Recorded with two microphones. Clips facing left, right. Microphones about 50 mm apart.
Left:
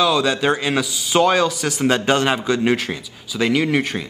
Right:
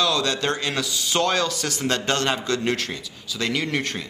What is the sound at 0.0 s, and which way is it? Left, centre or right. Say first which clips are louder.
A man's voice: left 5 dB; centre.